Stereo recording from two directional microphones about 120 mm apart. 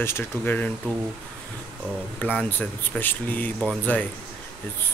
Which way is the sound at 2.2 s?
10° left (ahead or behind).